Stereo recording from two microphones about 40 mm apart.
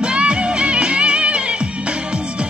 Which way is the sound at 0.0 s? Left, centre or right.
Right.